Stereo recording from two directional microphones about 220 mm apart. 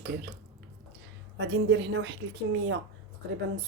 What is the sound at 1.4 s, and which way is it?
A woman's voice, 55° right (ahead or behind).